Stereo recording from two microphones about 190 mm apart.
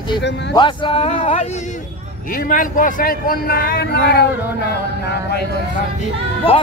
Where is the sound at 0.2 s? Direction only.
65° left (ahead or behind).